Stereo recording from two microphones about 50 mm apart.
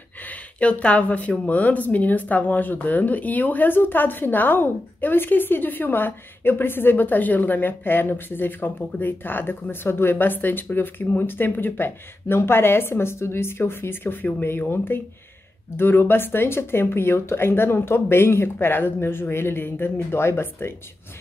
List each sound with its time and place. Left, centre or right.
0.3 s speech: left